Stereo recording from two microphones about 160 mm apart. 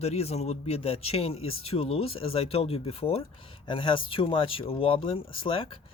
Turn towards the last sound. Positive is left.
turn(degrees=35)  # may be behind; listen again after turning